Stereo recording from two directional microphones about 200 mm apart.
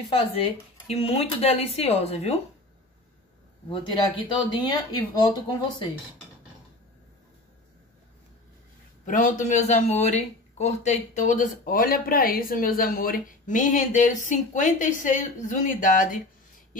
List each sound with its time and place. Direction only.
0.1 s speech: 25° left (ahead or behind)
3.6 s speech: 25° left (ahead or behind)
9.0 s speech: 40° left (ahead or behind)